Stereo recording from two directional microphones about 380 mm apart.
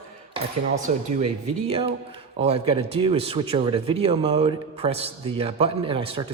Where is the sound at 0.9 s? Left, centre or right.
Centre.